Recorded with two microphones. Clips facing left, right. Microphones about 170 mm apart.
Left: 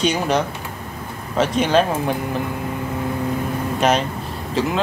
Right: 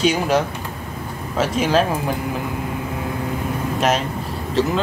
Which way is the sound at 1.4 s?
5° right (ahead or behind).